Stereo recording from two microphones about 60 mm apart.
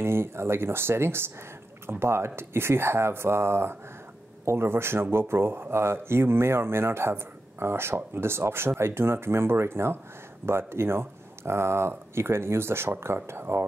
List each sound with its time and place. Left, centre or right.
0.0 s speech: right